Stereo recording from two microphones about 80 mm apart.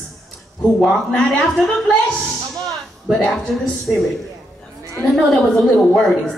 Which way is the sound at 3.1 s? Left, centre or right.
Centre.